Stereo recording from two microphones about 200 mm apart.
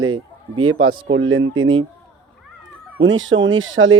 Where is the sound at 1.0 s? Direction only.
70° right (ahead or behind).